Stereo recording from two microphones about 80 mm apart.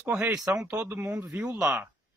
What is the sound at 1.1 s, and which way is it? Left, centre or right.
Speech, right.